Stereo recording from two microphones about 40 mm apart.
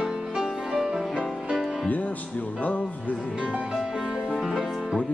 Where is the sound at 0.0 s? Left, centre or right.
Centre.